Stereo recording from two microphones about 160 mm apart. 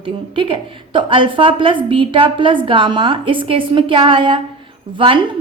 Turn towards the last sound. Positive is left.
turn(degrees=-30)  # may be behind; listen again after turning